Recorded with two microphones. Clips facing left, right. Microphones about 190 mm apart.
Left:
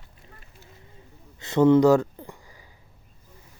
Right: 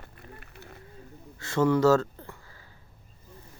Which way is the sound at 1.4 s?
20° left (ahead or behind).